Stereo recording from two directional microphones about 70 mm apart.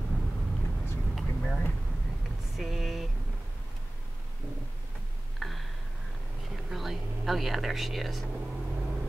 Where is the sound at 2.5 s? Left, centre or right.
Centre.